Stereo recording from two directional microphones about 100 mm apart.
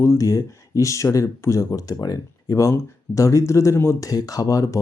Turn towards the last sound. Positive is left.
turn(degrees=35)  # may be behind; listen again after turning